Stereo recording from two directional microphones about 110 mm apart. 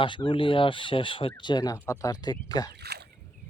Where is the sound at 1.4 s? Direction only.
40° left (ahead or behind).